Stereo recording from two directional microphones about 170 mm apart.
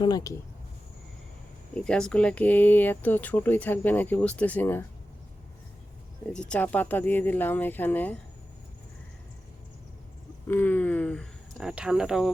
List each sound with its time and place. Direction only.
0.0 s speech: 20° left (ahead or behind)
1.7 s speech: 5° left (ahead or behind)
6.3 s speech: 5° left (ahead or behind)
10.5 s speech: 10° left (ahead or behind)